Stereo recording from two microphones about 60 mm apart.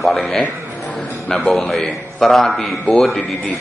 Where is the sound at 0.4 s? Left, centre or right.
Left.